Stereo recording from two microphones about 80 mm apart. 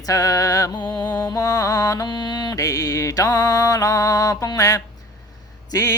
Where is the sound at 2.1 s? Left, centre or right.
Left.